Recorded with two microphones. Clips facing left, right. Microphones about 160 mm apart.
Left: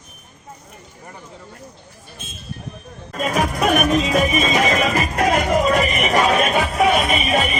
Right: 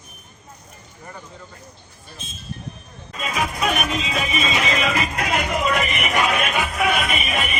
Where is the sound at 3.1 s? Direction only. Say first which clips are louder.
Left 5 dB; 50° left (ahead or behind).